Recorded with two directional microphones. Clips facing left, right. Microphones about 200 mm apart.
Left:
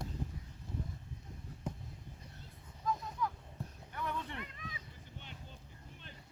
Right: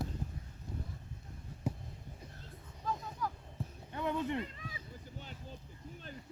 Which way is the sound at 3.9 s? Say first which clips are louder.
Right 7 dB; 20° right (ahead or behind).